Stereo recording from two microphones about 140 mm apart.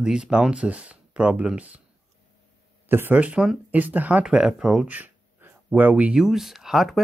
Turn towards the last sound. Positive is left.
turn(degrees=0)  # may be behind; listen again after turning